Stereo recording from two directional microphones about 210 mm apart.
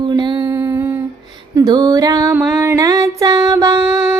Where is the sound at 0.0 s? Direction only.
20° right (ahead or behind).